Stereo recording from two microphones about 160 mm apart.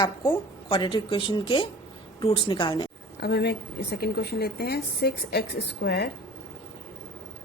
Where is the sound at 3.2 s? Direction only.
75° left (ahead or behind).